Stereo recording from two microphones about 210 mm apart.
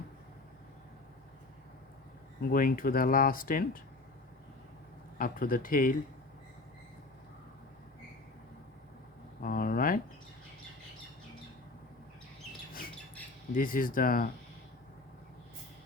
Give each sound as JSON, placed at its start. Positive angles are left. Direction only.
{"t": 2.5, "sound": "speech", "side_deg": 45}
{"t": 5.1, "sound": "speech", "side_deg": 45}
{"t": 9.4, "sound": "a sound", "side_deg": 45}
{"t": 13.5, "sound": "speech", "side_deg": 40}